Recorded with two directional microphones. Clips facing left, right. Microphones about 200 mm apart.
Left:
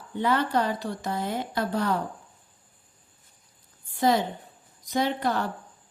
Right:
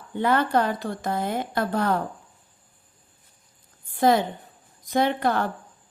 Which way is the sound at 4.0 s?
55° right (ahead or behind).